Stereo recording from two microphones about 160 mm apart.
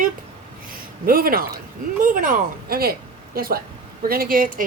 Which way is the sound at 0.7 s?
65° right (ahead or behind).